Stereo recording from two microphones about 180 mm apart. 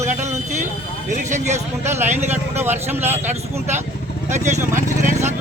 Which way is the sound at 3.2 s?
40° right (ahead or behind).